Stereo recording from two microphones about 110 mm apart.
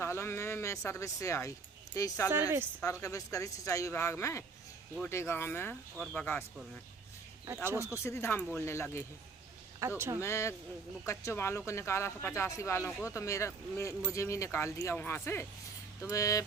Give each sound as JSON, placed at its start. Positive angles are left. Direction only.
{"t": 0.0, "sound": "a sound", "side_deg": 25}
{"t": 2.0, "sound": "speech", "side_deg": 30}
{"t": 7.4, "sound": "speech", "side_deg": -20}
{"t": 7.8, "sound": "speech", "side_deg": 25}
{"t": 9.8, "sound": "speech", "side_deg": -25}
{"t": 10.2, "sound": "speech", "side_deg": 25}